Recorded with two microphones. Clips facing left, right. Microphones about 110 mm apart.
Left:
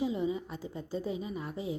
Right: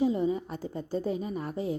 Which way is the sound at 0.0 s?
45° right (ahead or behind).